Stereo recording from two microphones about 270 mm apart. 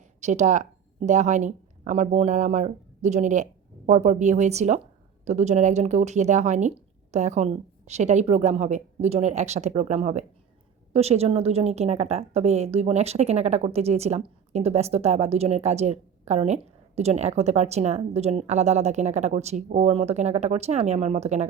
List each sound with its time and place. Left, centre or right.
0.2 s a woman's voice: right